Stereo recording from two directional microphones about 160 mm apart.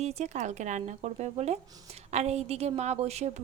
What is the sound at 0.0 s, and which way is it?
A woman's voice, 45° right (ahead or behind).